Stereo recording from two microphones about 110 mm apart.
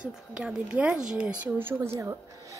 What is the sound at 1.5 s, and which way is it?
Speech, 20° right (ahead or behind).